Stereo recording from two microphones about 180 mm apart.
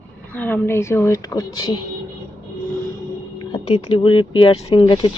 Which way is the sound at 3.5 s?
30° left (ahead or behind).